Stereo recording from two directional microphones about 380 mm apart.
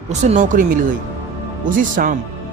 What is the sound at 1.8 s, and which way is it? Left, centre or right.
Speech, right.